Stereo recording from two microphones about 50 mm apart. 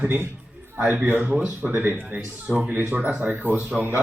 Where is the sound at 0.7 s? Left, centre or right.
Right.